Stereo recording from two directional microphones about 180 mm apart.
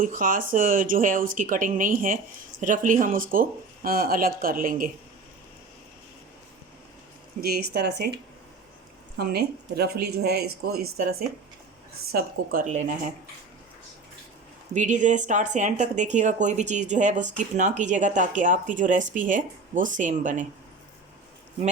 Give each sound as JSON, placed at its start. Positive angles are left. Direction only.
{"t": 0.0, "sound": "speech", "side_deg": -50}
{"t": 7.4, "sound": "speech", "side_deg": -60}
{"t": 14.7, "sound": "speech", "side_deg": -45}